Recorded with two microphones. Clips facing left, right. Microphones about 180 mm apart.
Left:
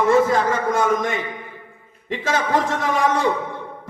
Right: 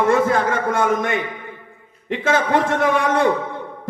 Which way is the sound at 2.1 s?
55° right (ahead or behind).